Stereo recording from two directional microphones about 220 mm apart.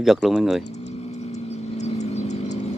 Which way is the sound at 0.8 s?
30° left (ahead or behind).